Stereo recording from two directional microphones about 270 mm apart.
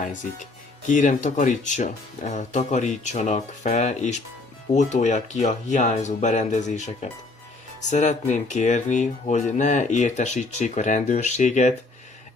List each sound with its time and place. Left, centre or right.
0.0 s speech: left